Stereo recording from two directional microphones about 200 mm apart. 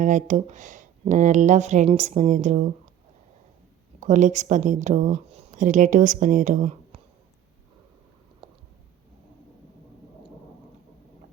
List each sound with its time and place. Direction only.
0.0 s speech: 35° right (ahead or behind)
4.0 s speech: 35° right (ahead or behind)